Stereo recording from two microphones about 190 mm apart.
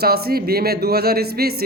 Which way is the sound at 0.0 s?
55° right (ahead or behind).